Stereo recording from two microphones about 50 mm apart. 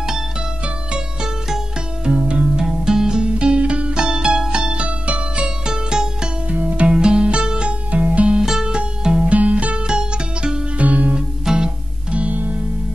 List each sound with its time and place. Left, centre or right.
2.0 s music: centre
5.7 s music: centre
6.5 s music: right
8.4 s music: centre
9.3 s music: right
9.8 s music: centre
10.8 s music: right
11.1 s music: centre
12.3 s music: right